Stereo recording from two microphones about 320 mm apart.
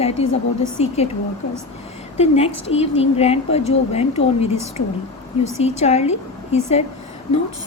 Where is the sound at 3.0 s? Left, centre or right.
Centre.